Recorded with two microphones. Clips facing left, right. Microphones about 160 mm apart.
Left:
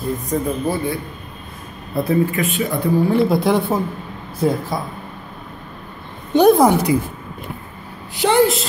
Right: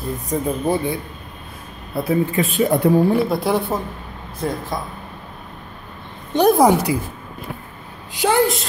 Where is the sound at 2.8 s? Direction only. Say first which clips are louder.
Right 2 dB; 65° right (ahead or behind).